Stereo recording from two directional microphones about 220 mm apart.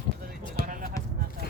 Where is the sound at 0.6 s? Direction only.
40° right (ahead or behind).